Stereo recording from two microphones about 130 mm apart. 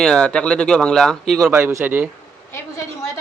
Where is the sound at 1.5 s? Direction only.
15° right (ahead or behind).